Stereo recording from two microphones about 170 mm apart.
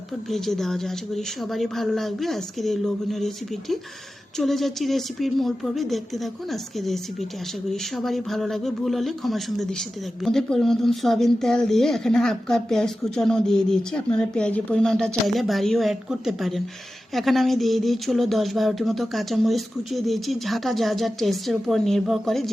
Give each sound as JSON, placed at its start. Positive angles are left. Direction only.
{"t": 0.3, "sound": "speech", "side_deg": 0}